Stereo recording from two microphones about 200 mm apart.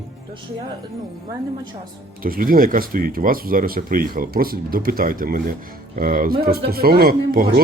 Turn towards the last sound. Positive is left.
turn(degrees=-50)  # may be behind; listen again after turning